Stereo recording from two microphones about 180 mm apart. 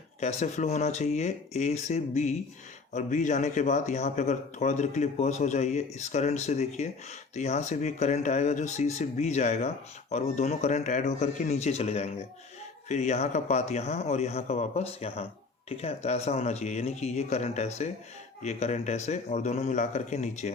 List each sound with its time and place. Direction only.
0.2 s speech: 40° left (ahead or behind)